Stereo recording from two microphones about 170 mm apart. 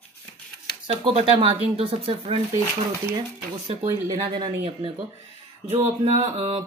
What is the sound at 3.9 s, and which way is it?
Speech, 30° right (ahead or behind).